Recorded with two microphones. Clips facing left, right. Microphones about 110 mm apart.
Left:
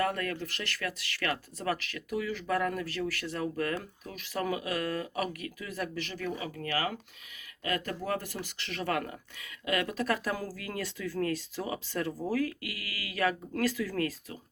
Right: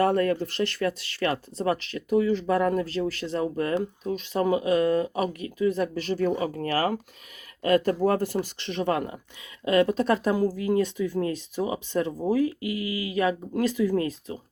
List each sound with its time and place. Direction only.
0.0 s speech: 30° right (ahead or behind)